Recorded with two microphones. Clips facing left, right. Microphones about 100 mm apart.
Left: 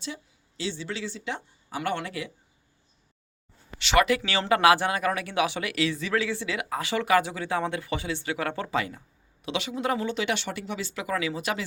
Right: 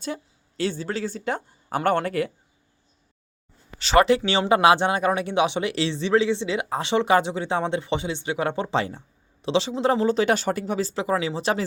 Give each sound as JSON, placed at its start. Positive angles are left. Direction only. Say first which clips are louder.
{"t": 0.0, "sound": "speech", "louder": "right 6 dB", "side_deg": -50}
{"t": 3.8, "sound": "speech", "louder": "right 5 dB", "side_deg": -35}